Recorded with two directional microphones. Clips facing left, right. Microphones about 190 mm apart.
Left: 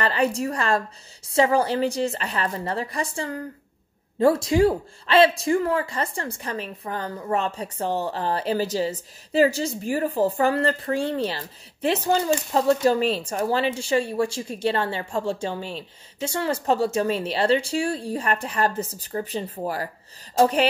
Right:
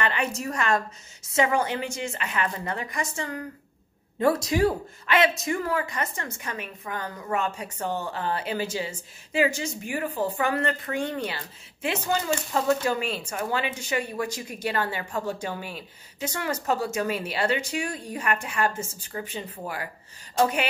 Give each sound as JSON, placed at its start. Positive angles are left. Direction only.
{"t": 0.0, "sound": "speech", "side_deg": 35}